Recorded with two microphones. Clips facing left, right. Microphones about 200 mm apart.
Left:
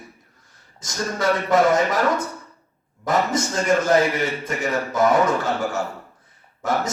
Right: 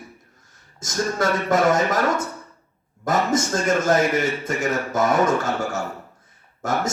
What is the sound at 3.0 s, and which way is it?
A man's voice, 45° right (ahead or behind).